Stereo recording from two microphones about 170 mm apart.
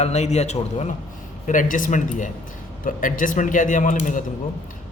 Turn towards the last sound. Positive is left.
turn(degrees=50)  # may be behind; listen again after turning